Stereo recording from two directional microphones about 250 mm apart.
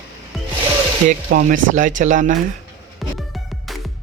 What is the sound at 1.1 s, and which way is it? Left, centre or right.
Speech, right.